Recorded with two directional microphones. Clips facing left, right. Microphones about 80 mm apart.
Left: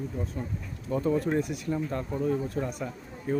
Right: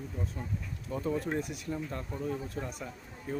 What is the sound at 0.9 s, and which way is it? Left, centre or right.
Speech, left.